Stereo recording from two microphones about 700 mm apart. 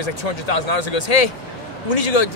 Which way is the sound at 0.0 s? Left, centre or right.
Left.